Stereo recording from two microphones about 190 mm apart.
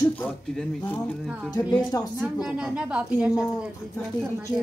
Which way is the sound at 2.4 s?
5° right (ahead or behind).